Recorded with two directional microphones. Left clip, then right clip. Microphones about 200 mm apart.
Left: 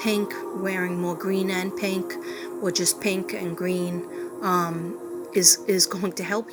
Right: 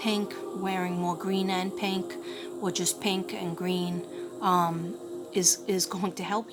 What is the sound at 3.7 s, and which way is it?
Speech, 25° left (ahead or behind).